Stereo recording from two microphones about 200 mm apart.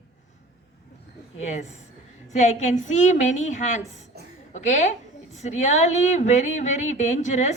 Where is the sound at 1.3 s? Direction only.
35° left (ahead or behind).